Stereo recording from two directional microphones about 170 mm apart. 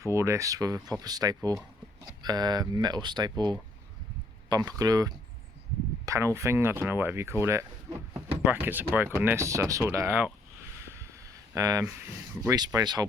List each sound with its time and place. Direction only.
0.0 s speech: 15° right (ahead or behind)
10.8 s a sound: 15° right (ahead or behind)
12.4 s speech: 20° right (ahead or behind)